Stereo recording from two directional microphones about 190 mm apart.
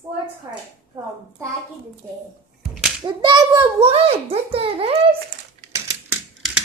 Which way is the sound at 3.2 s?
25° right (ahead or behind).